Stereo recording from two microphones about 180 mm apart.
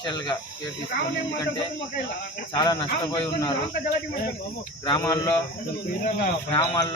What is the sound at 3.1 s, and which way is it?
Speech, 25° left (ahead or behind).